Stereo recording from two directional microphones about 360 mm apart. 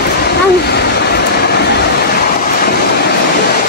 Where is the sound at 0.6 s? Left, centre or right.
Left.